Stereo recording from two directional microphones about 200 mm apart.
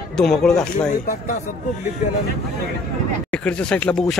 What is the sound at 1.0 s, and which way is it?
Speech, 40° left (ahead or behind).